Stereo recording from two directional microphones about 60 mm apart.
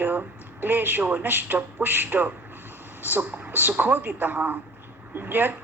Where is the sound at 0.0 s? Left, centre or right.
Right.